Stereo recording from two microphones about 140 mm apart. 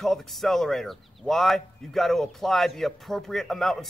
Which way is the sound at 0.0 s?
Centre (ahead or behind).